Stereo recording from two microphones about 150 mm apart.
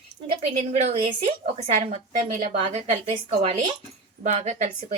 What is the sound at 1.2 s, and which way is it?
A woman's voice, 45° right (ahead or behind).